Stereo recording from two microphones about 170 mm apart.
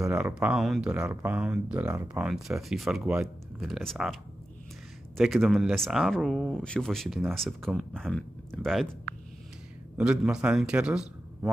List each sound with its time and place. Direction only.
0.0 s speech: 10° right (ahead or behind)
2.2 s speech: centre (ahead or behind)
9.9 s a man's voice: 5° right (ahead or behind)